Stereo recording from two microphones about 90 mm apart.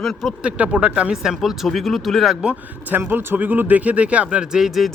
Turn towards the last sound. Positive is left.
turn(degrees=-5)  # may be behind; listen again after turning